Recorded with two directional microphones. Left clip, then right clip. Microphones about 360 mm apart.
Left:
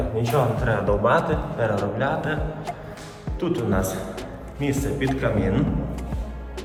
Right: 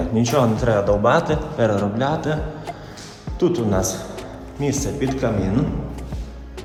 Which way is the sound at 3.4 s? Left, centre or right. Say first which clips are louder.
Right 5 dB; centre.